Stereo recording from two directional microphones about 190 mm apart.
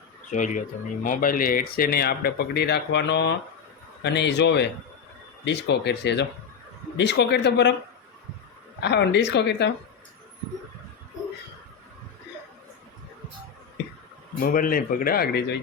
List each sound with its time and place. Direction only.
0.3 s a woman's voice: 40° left (ahead or behind); by 7.7 s 65° left (ahead or behind)
8.8 s a woman's voice: 65° left (ahead or behind)
14.4 s speech: 50° left (ahead or behind)